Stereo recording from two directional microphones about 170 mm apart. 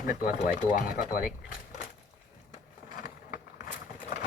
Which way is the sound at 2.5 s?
55° left (ahead or behind).